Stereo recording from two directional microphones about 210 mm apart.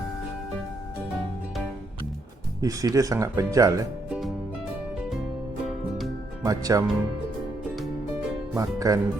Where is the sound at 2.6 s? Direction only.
15° right (ahead or behind).